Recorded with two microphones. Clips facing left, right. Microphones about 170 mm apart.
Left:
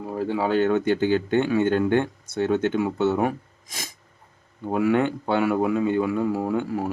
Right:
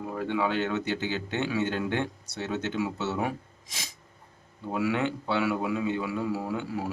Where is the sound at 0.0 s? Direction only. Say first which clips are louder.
Left 4 dB; 30° left (ahead or behind).